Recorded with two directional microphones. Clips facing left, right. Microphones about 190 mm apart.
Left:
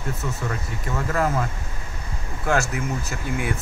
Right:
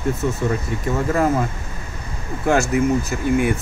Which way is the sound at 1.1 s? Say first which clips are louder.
Right 4 dB; 20° right (ahead or behind).